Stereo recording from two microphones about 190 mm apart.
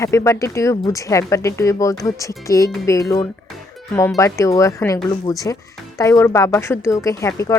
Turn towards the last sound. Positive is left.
turn(degrees=15)  # may be behind; listen again after turning